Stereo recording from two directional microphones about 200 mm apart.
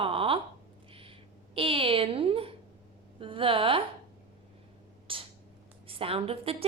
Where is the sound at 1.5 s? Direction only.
25° right (ahead or behind).